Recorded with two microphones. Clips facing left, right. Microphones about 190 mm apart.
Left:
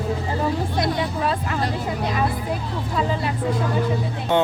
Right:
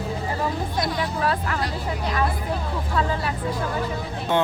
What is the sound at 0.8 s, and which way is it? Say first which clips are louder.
Hubbub: left 2 dB; 20° left (ahead or behind).